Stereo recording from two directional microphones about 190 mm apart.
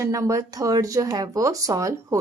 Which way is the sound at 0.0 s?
15° right (ahead or behind).